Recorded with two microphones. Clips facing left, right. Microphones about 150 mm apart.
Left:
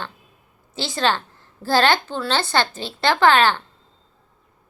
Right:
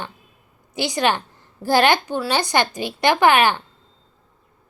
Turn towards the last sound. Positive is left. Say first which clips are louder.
# even
turn(degrees=-15)  # may be behind; listen again after turning